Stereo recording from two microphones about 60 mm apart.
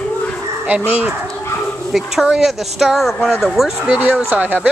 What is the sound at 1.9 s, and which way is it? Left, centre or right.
Speech, centre.